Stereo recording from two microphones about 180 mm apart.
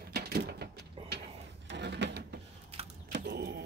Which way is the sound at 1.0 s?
30° right (ahead or behind).